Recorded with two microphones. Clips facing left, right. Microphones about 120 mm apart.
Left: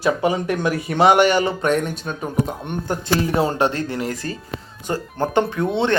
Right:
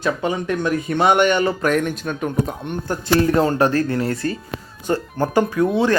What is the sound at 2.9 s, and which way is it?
Speech, 10° left (ahead or behind).